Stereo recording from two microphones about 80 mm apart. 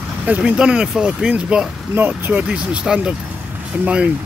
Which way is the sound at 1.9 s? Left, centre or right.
Right.